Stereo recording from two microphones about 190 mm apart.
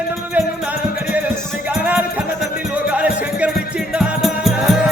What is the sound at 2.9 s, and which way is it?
Music, 5° right (ahead or behind).